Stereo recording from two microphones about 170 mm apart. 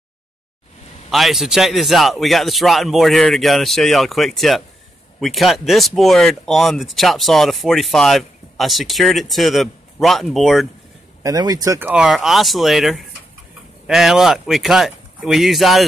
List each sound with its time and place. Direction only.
1.1 s speech: centre (ahead or behind)
11.2 s speech: 20° right (ahead or behind)
12.0 s speech: centre (ahead or behind)